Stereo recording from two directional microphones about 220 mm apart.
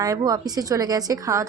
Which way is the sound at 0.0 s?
15° right (ahead or behind).